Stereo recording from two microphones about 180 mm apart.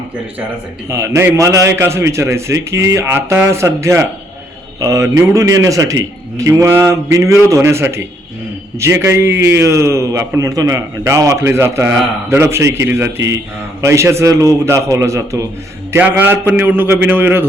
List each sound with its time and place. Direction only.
0.9 s a man's voice: 15° right (ahead or behind)